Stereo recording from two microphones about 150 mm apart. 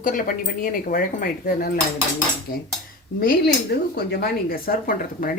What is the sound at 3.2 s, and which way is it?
Speech, 85° left.